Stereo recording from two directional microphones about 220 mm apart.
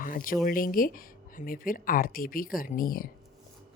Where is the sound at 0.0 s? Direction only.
40° left (ahead or behind).